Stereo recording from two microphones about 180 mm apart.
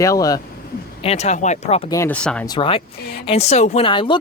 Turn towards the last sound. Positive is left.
turn(degrees=25)  # may be behind; listen again after turning